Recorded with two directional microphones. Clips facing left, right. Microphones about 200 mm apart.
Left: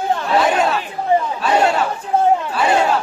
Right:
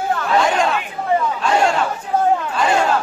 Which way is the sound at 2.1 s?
25° left (ahead or behind).